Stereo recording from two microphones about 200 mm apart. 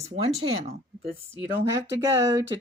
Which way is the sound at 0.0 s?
30° right (ahead or behind).